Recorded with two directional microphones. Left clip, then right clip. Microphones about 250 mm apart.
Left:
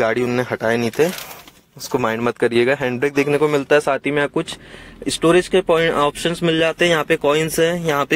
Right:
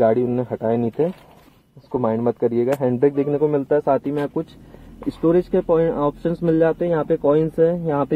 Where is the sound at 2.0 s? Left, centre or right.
Left.